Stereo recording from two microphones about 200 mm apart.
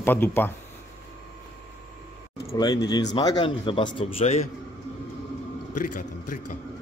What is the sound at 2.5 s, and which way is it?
Speech, 20° left (ahead or behind).